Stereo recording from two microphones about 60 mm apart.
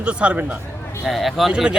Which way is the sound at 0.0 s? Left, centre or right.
Centre.